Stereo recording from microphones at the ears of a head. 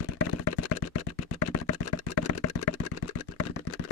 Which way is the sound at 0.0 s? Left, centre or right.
Left.